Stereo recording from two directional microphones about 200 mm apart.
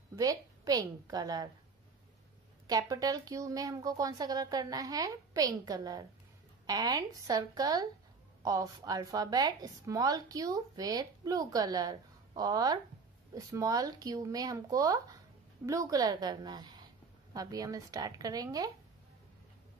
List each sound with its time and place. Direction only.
0.1 s a woman's voice: 15° right (ahead or behind)
2.6 s a woman's voice: 20° right (ahead or behind)